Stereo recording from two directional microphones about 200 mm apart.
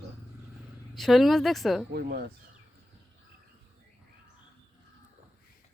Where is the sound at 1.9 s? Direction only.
55° right (ahead or behind).